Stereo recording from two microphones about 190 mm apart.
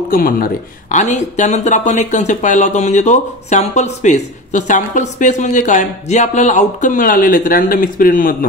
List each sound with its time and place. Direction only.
0.1 s speech: 50° left (ahead or behind)
0.9 s speech: 40° left (ahead or behind)